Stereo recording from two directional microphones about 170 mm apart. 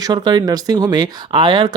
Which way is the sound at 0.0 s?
25° right (ahead or behind).